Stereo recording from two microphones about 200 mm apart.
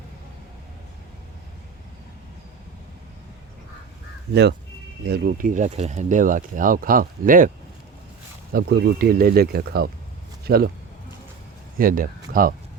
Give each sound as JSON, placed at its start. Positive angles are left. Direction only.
{"t": 5.0, "sound": "speech", "side_deg": -50}
{"t": 8.5, "sound": "speech", "side_deg": -55}
{"t": 11.8, "sound": "speech", "side_deg": -45}